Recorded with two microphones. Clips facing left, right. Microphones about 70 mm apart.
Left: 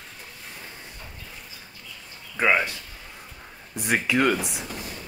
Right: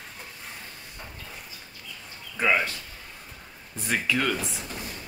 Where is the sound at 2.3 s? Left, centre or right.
Centre.